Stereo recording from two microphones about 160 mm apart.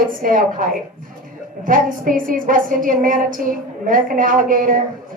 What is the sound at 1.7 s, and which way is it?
A woman's voice, 60° right (ahead or behind).